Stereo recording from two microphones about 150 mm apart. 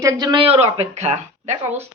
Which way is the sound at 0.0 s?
30° right (ahead or behind).